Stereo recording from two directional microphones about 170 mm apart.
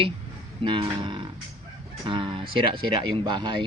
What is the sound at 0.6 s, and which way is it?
Speech, 30° right (ahead or behind).